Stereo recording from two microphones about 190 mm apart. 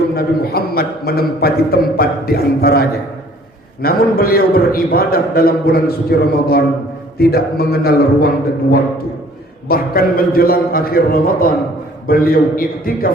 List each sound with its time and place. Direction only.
0.2 s a man's voice: 55° left (ahead or behind)
9.6 s a man's voice: 50° left (ahead or behind)